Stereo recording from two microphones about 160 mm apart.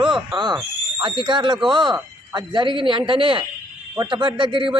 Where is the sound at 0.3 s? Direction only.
30° right (ahead or behind).